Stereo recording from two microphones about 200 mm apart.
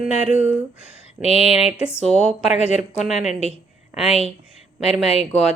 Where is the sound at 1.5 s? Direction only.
5° right (ahead or behind).